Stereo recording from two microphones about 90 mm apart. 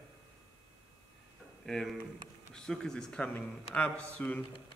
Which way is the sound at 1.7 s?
5° left (ahead or behind).